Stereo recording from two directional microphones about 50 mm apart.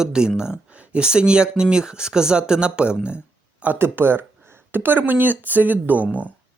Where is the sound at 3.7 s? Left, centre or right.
Right.